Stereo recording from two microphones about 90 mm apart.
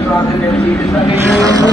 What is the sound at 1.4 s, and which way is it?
Vehicle, 40° right (ahead or behind).